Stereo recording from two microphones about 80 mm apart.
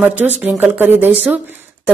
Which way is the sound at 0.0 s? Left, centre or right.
Right.